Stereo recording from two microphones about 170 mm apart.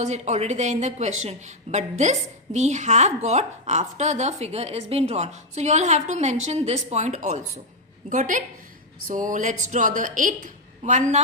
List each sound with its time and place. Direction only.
0.0 s a woman's voice: 45° right (ahead or behind)